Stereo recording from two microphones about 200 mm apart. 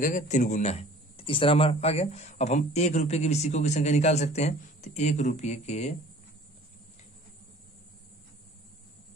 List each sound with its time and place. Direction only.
0.0 s speech: 40° left (ahead or behind)